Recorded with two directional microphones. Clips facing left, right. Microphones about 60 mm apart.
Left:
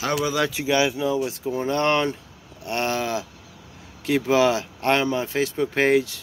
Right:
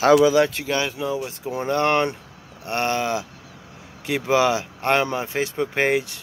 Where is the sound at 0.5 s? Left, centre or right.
Centre.